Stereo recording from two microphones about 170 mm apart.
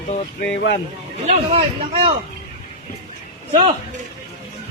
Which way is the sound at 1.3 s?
35° right (ahead or behind).